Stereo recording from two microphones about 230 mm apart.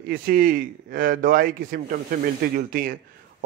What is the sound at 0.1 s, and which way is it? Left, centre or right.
A man's voice, right.